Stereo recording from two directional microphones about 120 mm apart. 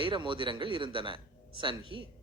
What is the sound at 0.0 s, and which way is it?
Speech, 45° right (ahead or behind).